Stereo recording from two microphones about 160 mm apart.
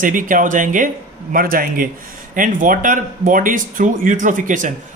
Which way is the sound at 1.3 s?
65° right (ahead or behind).